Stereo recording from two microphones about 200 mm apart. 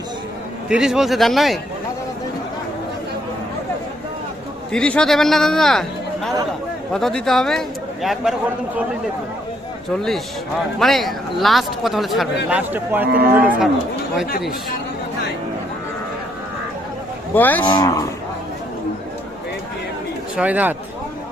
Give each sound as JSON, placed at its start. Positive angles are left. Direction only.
{"t": 0.7, "sound": "speech", "side_deg": -5}
{"t": 4.7, "sound": "speech", "side_deg": 5}
{"t": 6.9, "sound": "speech", "side_deg": 0}
{"t": 10.8, "sound": "speech", "side_deg": 0}
{"t": 13.1, "sound": "speech", "side_deg": -50}
{"t": 17.3, "sound": "cattle", "side_deg": 10}
{"t": 17.7, "sound": "cattle", "side_deg": 20}
{"t": 20.3, "sound": "speech", "side_deg": -5}